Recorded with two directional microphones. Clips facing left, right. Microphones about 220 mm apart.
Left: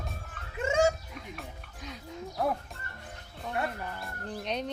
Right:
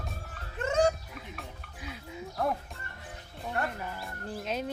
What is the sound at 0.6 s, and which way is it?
Music, 10° left (ahead or behind).